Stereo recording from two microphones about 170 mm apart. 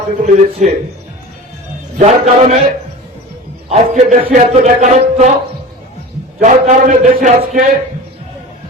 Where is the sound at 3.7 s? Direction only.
50° right (ahead or behind).